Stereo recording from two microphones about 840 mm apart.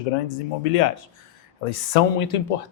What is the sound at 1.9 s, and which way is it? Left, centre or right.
Speech, left.